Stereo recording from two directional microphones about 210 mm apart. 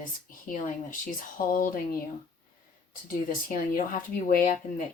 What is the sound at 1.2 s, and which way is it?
Speech, 40° left (ahead or behind).